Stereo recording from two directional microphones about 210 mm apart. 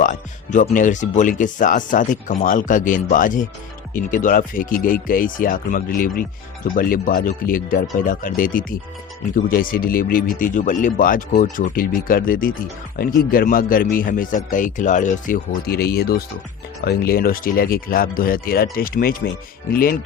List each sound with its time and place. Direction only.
0.0 s speech: 35° left (ahead or behind)